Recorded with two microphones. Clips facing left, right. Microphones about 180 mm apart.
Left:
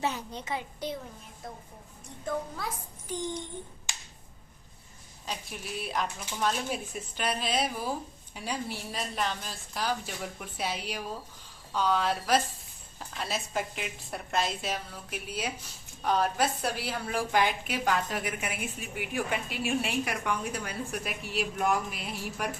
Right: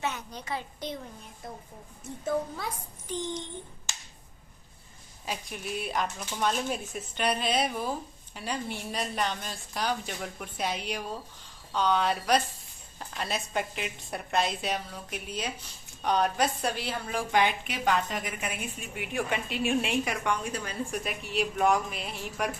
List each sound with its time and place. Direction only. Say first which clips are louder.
0.0 s a woman's voice: left 2 dB; 30° left (ahead or behind)
0.8 s speech: left 3 dB; 10° left (ahead or behind)
2.2 s a woman's voice: right 3 dB; centre (ahead or behind)
5.2 s a woman's voice: right 2 dB; 5° right (ahead or behind)